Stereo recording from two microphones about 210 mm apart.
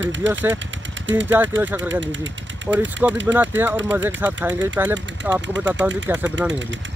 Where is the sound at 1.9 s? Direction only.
60° right (ahead or behind).